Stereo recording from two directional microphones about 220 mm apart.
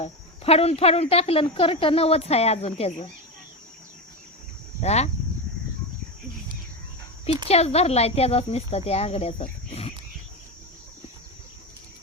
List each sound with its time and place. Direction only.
0.0 s a woman's voice: 25° left (ahead or behind)
4.8 s speech: 30° left (ahead or behind)
7.4 s a woman's voice: 30° left (ahead or behind)